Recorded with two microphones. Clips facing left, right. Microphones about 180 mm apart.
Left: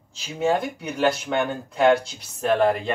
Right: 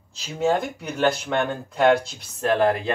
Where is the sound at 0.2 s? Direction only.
10° left (ahead or behind).